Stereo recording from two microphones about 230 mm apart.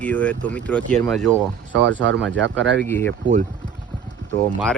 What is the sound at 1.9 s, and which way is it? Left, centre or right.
Speech, right.